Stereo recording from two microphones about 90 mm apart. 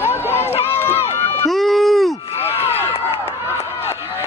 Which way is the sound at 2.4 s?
90° left.